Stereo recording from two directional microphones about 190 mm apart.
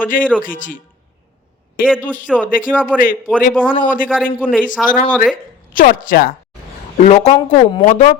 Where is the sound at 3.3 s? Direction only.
10° left (ahead or behind).